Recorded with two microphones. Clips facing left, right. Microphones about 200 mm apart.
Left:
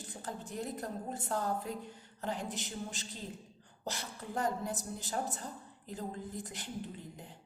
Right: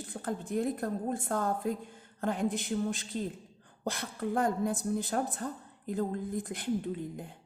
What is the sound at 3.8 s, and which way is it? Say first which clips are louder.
A woman's voice: right 8 dB; 55° right (ahead or behind).